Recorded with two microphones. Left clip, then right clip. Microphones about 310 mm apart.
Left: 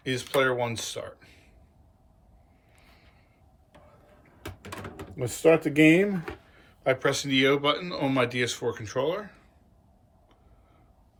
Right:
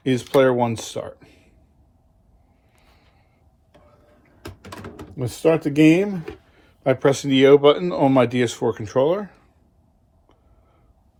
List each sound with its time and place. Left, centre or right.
0.0 s speech: centre
2.7 s vehicle: centre
4.4 s door: centre
5.2 s speech: centre